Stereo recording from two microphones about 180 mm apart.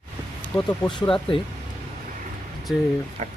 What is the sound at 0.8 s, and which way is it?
Speech, 25° left (ahead or behind).